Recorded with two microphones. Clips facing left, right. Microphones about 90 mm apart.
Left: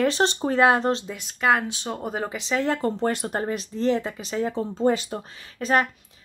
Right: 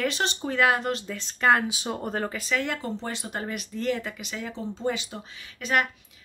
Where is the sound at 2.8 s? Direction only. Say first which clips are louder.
Left 8 dB; 50° left (ahead or behind).